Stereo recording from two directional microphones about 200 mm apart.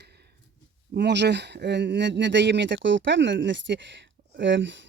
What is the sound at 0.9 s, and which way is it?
Speech, 60° right (ahead or behind).